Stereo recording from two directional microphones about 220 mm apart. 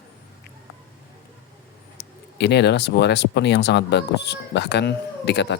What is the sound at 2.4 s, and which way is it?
Speech, 50° left (ahead or behind).